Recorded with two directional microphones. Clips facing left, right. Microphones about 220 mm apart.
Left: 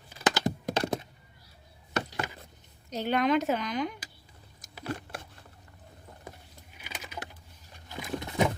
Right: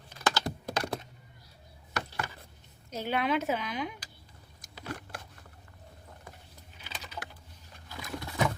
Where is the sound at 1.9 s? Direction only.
20° left (ahead or behind).